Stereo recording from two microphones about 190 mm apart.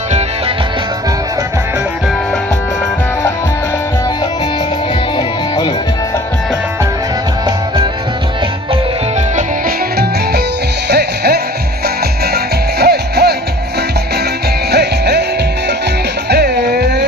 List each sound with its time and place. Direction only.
5.1 s music: 25° left (ahead or behind)
9.3 s music: 50° right (ahead or behind)
12.8 s music: 60° right (ahead or behind)
14.7 s music: 60° right (ahead or behind)
16.3 s music: 60° right (ahead or behind)